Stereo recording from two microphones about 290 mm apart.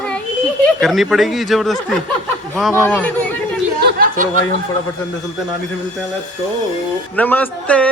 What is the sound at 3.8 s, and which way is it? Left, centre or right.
Speech, right.